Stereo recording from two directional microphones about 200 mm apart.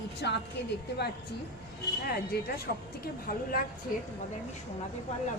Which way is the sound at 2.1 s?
50° left (ahead or behind).